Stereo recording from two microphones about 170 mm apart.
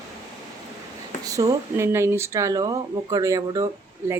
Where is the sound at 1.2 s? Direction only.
20° right (ahead or behind).